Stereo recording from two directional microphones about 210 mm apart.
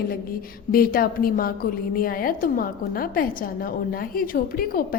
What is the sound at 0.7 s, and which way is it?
A woman's voice, 45° left (ahead or behind).